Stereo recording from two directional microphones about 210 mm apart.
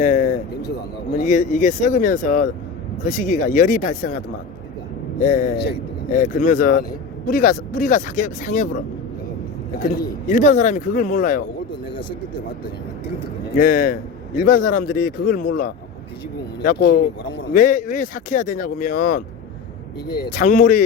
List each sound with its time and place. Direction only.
0.0 s a sound: 35° left (ahead or behind)
1.1 s speech: 35° left (ahead or behind)
5.2 s speech: 40° left (ahead or behind)
9.8 s speech: 45° left (ahead or behind)
11.9 s speech: 25° left (ahead or behind)
13.6 s a man's voice: 40° left (ahead or behind)